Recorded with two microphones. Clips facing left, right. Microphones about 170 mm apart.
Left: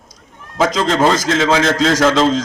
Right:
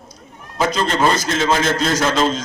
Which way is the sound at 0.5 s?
90° left.